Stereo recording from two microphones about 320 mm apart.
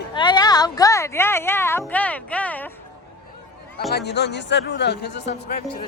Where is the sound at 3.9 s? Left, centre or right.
Left.